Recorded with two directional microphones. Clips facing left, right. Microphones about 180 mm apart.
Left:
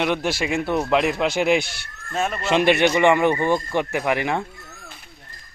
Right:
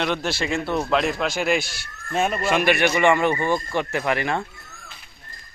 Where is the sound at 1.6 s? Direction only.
60° left (ahead or behind).